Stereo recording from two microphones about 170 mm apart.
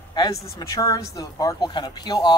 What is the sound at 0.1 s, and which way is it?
Speech, 25° left (ahead or behind).